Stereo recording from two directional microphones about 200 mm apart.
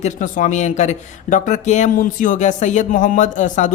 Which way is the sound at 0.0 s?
40° left (ahead or behind).